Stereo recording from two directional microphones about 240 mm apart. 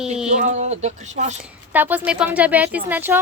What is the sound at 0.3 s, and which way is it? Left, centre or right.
Speech, right.